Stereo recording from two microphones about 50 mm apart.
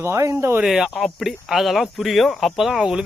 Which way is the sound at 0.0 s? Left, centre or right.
Right.